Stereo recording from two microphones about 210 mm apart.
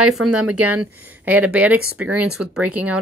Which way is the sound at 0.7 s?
10° right (ahead or behind).